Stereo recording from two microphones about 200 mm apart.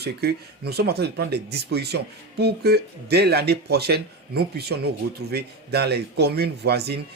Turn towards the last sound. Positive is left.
turn(degrees=-55)  # may be behind; listen again after turning